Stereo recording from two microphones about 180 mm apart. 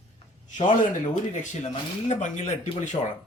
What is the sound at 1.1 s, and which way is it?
A man's voice, 40° left (ahead or behind).